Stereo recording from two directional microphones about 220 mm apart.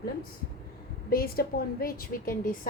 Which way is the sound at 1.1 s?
45° left (ahead or behind).